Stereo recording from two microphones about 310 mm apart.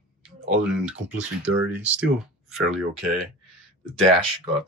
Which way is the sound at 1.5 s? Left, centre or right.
Right.